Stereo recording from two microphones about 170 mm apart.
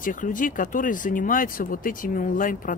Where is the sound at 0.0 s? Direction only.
50° left (ahead or behind).